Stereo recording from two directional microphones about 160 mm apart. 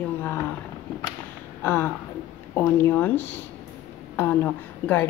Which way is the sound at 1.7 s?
15° left (ahead or behind).